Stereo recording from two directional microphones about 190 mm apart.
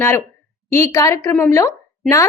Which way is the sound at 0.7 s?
15° left (ahead or behind).